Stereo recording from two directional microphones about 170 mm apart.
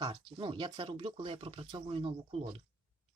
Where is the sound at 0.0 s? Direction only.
25° right (ahead or behind).